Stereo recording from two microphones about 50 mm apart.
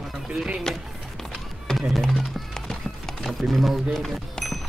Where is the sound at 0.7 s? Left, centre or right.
Centre.